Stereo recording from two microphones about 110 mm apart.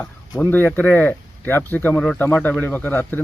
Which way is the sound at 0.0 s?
15° left (ahead or behind).